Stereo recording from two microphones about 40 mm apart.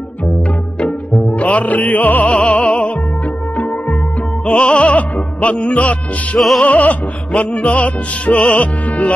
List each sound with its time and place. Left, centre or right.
1.3 s music: left
4.5 s music: left